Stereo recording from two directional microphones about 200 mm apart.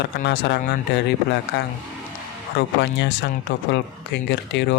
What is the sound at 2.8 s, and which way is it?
Speech, 60° left (ahead or behind).